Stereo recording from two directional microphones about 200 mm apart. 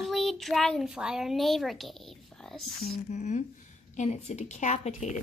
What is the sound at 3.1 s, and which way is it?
Speech, 35° left (ahead or behind).